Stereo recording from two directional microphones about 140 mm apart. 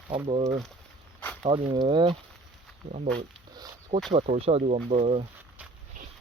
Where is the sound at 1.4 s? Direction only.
40° right (ahead or behind).